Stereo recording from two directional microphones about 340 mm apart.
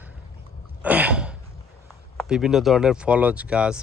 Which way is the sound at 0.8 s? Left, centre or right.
Centre.